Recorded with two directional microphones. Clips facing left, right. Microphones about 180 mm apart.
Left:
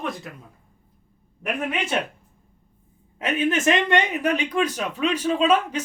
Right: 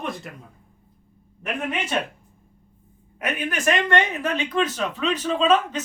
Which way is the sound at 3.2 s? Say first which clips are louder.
Left 3 dB; 25° left (ahead or behind).